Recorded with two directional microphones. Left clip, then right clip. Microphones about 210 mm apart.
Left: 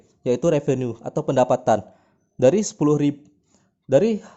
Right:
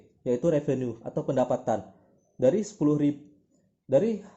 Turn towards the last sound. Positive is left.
turn(degrees=45)  # may be behind; listen again after turning